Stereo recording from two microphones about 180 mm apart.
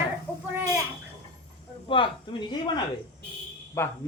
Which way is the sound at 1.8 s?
30° left (ahead or behind).